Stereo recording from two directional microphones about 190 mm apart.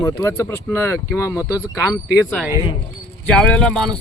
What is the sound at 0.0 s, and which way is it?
Speech, 15° left (ahead or behind).